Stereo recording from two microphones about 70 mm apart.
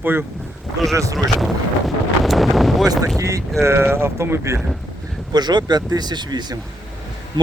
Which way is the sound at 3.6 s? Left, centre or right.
Right.